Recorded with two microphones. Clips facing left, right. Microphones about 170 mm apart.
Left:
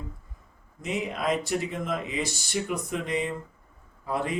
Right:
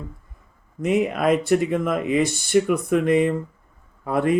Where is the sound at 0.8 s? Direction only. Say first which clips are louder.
Right 10 dB; 55° right (ahead or behind).